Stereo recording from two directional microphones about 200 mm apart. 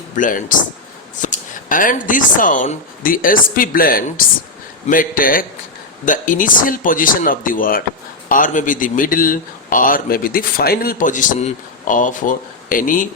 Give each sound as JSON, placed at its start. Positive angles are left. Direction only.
{"t": 0.2, "sound": "a man's voice", "side_deg": 40}